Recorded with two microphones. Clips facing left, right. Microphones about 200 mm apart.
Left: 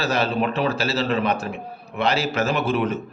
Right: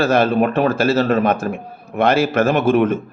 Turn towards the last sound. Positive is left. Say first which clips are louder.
# right 7 dB
turn(degrees=-50)  # may be behind; listen again after turning